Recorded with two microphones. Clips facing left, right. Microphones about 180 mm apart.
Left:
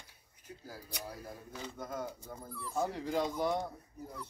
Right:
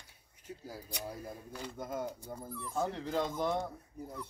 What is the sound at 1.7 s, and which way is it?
Speech, 20° right (ahead or behind).